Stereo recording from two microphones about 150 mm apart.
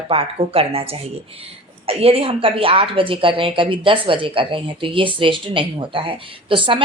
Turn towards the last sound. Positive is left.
turn(degrees=-35)  # may be behind; listen again after turning